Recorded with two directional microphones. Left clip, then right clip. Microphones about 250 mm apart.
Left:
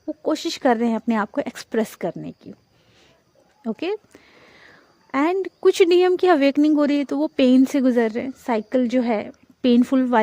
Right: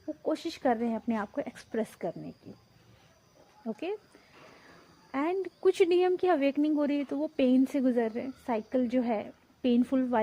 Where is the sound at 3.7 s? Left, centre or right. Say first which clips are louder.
Left 10 dB; left.